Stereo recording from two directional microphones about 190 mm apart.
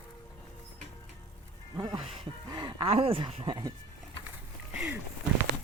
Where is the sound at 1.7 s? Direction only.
25° right (ahead or behind).